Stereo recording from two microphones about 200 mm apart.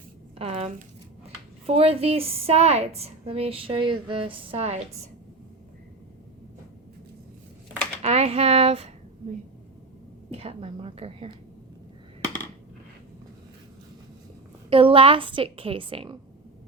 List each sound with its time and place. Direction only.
0.3 s a sound: 30° right (ahead or behind)
1.6 s a woman's voice: 30° right (ahead or behind)
8.0 s speech: 30° right (ahead or behind)
10.3 s a woman's voice: 30° right (ahead or behind)
14.7 s a woman's voice: 25° right (ahead or behind)